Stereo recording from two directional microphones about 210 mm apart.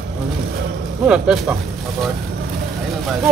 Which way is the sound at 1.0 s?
Centre (ahead or behind).